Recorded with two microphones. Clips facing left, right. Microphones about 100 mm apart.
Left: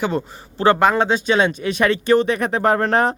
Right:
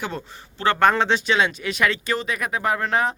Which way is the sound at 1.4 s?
25° left (ahead or behind).